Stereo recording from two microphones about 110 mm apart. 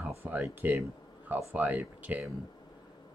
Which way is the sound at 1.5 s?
15° right (ahead or behind).